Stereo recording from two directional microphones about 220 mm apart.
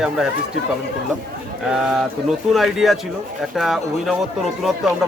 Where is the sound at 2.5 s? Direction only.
Centre (ahead or behind).